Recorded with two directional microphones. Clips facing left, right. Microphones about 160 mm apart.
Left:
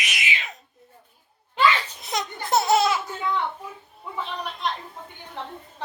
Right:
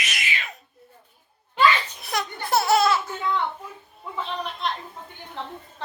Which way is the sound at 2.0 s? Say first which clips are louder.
Even; 20° left (ahead or behind).